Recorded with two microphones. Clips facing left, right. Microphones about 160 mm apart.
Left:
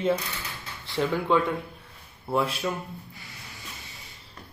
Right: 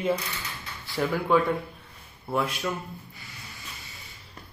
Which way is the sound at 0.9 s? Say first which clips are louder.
Left 1 dB; 20° left (ahead or behind).